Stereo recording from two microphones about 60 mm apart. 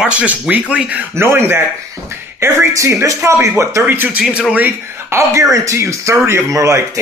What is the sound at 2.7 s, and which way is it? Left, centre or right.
Speech, right.